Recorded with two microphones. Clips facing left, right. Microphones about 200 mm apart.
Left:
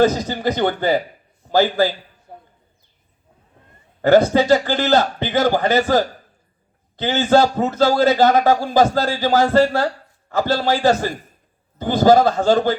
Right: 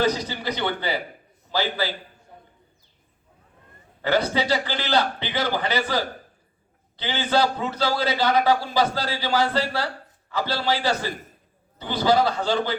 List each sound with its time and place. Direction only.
0.0 s a man's voice: 45° left (ahead or behind)
4.0 s a man's voice: 45° left (ahead or behind)